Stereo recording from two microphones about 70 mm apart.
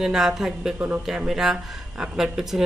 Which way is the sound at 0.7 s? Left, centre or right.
Right.